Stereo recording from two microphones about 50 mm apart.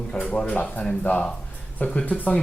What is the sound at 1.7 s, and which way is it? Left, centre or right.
Speech, left.